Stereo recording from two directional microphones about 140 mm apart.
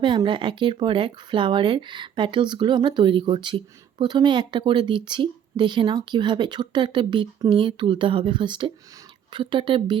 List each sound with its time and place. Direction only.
0.0 s speech: 35° right (ahead or behind)